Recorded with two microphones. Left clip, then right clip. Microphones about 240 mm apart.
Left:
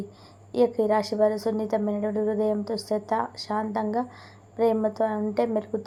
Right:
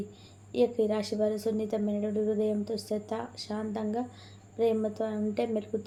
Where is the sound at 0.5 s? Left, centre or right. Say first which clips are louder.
Left 5 dB; centre.